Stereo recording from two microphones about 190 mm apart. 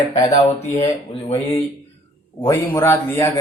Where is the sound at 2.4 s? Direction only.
20° left (ahead or behind).